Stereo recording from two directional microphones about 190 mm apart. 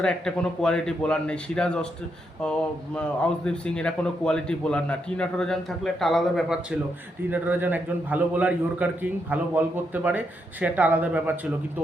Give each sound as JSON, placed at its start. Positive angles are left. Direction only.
{"t": 0.0, "sound": "a man's voice", "side_deg": 5}